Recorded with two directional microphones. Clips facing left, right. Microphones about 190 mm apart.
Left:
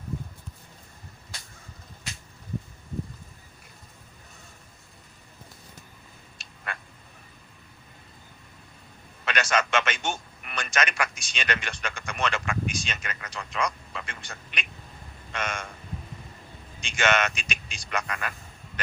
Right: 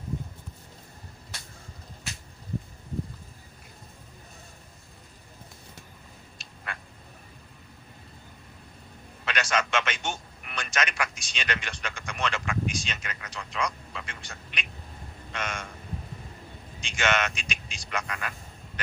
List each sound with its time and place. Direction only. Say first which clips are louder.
6.7 s frog: left 2 dB; 55° left (ahead or behind)
9.2 s a man's voice: left 2 dB; 50° left (ahead or behind)
16.8 s a man's voice: left 2 dB; 55° left (ahead or behind)